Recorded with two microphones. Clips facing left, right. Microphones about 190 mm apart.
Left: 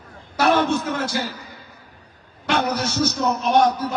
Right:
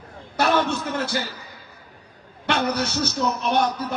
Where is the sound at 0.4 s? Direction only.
60° left (ahead or behind).